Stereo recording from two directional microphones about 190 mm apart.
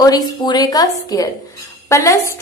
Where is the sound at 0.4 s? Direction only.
20° left (ahead or behind).